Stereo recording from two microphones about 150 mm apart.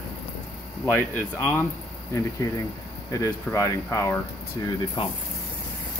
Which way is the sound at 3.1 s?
20° left (ahead or behind).